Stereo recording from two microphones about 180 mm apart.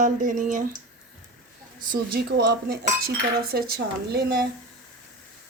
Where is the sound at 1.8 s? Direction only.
60° right (ahead or behind).